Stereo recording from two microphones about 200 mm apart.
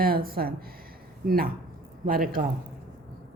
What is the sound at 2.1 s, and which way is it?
Speech, 45° right (ahead or behind).